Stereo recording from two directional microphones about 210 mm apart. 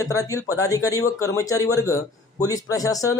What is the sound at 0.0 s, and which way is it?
Speech, 15° left (ahead or behind).